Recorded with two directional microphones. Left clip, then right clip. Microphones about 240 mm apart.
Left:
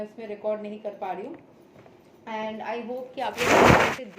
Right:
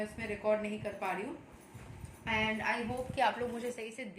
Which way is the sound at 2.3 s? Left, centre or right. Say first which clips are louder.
Left 1 dB; centre.